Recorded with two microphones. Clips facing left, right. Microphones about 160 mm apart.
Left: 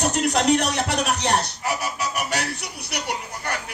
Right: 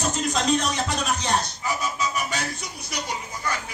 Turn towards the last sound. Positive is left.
turn(degrees=65)  # may be behind; listen again after turning